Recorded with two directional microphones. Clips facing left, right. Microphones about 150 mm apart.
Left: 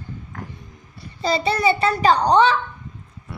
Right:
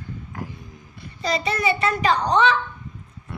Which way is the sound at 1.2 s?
30° left (ahead or behind).